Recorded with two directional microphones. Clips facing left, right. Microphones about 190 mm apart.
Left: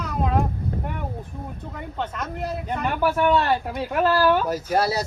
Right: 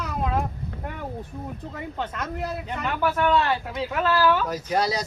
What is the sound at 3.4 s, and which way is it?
Speech, 50° left (ahead or behind).